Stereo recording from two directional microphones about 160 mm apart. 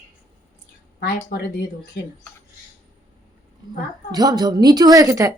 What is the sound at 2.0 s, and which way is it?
Speech, 90° left.